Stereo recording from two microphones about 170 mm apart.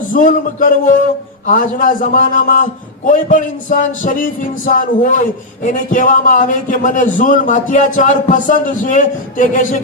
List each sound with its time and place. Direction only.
0.1 s a man's voice: 50° left (ahead or behind)